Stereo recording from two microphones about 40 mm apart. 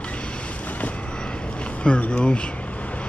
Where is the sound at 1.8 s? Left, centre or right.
Left.